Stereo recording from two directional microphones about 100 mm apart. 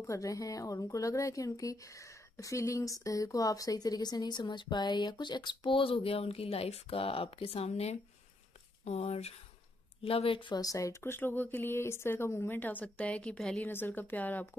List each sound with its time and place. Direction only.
0.0 s speech: 30° left (ahead or behind); by 9.3 s 90° left
10.0 s speech: 70° left (ahead or behind)
10.6 s speech: 35° left (ahead or behind); by 14.5 s 15° left (ahead or behind)